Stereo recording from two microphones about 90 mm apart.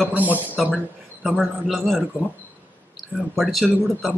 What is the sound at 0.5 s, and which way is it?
A man's voice, centre (ahead or behind).